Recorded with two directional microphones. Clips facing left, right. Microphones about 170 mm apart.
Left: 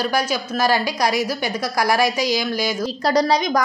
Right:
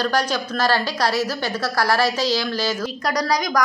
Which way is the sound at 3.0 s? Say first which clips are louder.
Left 5 dB; 25° left (ahead or behind).